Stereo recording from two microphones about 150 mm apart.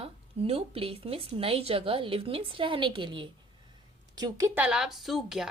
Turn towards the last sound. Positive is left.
turn(degrees=-5)  # may be behind; listen again after turning